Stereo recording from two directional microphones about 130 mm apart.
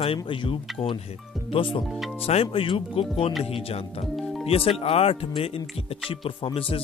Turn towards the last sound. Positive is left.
turn(degrees=45)  # may be behind; listen again after turning